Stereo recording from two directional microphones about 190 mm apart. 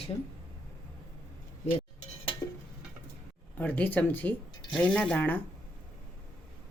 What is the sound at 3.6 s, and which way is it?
Speech, 10° left (ahead or behind).